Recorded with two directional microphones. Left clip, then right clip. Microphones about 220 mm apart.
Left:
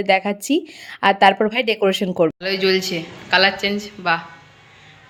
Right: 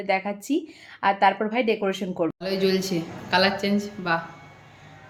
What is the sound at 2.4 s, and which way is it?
A woman's voice, 5° right (ahead or behind).